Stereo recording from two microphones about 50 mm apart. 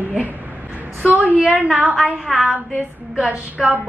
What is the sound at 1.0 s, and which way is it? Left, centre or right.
Speech, right.